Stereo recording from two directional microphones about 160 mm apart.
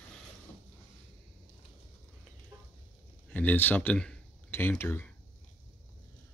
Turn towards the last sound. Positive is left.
turn(degrees=15)  # may be behind; listen again after turning